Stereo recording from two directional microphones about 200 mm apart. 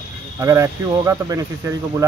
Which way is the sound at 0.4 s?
15° right (ahead or behind).